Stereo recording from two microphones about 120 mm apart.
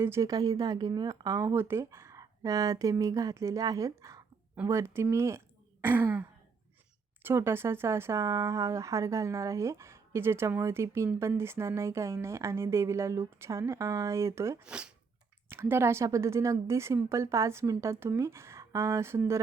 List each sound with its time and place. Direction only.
0.0 s speech: 25° right (ahead or behind)
5.8 s throat clearing: 15° right (ahead or behind)
7.2 s speech: 20° right (ahead or behind)
14.6 s throat clearing: 10° right (ahead or behind)
15.4 s speech: 20° right (ahead or behind)